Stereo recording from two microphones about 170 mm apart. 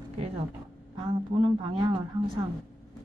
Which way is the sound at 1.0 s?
30° right (ahead or behind).